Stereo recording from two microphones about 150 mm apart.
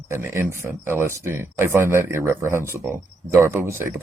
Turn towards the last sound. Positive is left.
turn(degrees=-15)  # may be behind; listen again after turning